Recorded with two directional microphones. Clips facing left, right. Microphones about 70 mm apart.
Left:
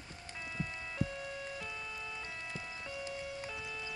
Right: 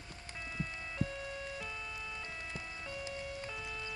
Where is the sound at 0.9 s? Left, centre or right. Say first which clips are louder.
Even; centre.